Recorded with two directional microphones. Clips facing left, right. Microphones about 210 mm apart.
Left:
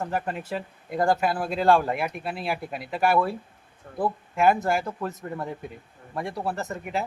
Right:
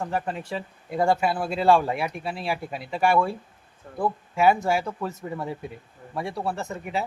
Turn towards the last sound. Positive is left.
turn(degrees=0)  # may be behind; listen again after turning